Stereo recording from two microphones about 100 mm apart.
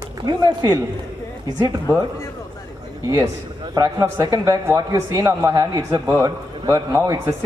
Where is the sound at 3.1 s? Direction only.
50° right (ahead or behind).